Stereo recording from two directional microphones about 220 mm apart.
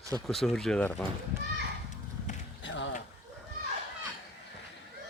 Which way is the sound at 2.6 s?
55° left (ahead or behind).